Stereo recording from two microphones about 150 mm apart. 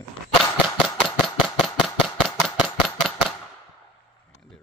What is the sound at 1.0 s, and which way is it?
Engine, centre (ahead or behind).